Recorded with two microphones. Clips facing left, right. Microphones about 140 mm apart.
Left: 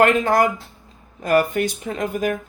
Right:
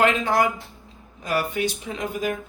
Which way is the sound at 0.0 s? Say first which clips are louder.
Left 4 dB; 50° left (ahead or behind).